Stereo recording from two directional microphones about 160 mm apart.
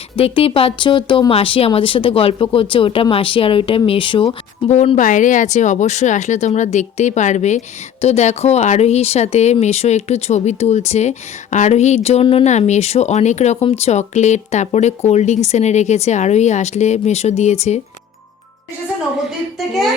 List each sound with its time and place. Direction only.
0.2 s speech: 35° left (ahead or behind)
4.7 s speech: 45° left (ahead or behind)
19.5 s a child's voice: centre (ahead or behind)